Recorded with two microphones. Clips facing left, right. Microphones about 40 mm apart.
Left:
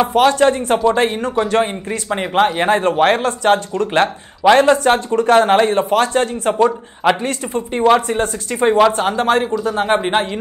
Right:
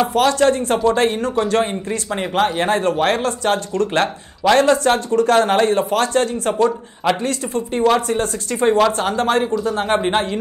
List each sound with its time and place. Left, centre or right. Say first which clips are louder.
0.0 s speech: left 2 dB; left
9.9 s a man's voice: left 1 dB; centre